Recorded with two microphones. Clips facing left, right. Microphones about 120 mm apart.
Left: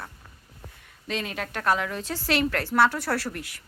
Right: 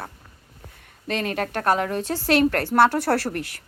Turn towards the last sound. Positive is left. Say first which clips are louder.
# right 4 dB
turn(degrees=-55)  # may be behind; listen again after turning